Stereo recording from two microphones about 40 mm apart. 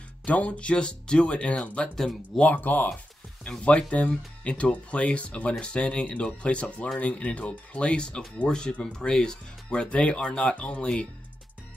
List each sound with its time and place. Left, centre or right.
0.2 s speech: left
2.5 s speech: left
3.4 s speech: left
9.7 s speech: left